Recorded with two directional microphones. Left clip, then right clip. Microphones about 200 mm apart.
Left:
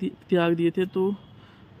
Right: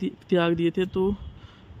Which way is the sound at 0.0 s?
5° right (ahead or behind).